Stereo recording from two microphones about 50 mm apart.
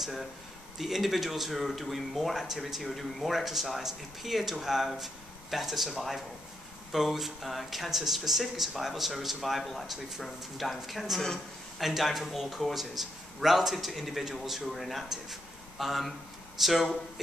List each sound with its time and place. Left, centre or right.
0.0 s speech: centre